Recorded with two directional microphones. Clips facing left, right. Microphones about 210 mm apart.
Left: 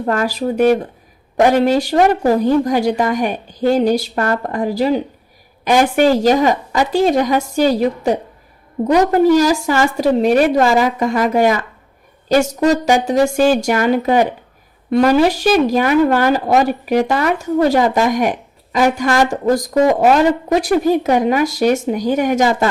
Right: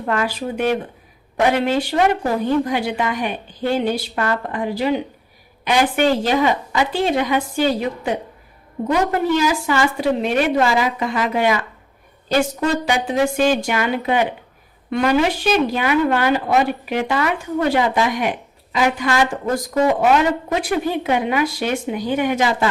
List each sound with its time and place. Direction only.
0.0 s a woman's voice: 40° left (ahead or behind)